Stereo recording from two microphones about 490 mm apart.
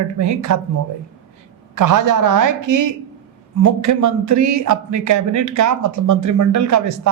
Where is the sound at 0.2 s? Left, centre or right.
Right.